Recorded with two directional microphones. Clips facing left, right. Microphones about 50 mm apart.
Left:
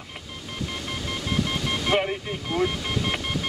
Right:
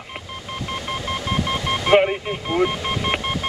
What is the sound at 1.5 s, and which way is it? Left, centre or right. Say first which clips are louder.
Vehicle: right 10 dB; right.